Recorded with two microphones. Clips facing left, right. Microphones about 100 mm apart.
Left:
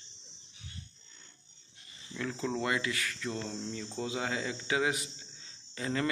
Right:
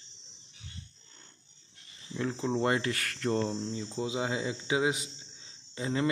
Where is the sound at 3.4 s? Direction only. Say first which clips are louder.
Right 5 dB; 30° right (ahead or behind).